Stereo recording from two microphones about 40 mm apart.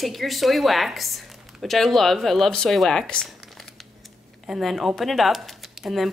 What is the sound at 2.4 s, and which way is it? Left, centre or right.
Speech, centre.